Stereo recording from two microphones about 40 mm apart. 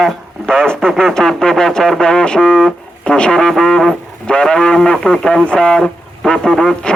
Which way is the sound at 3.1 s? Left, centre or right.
Left.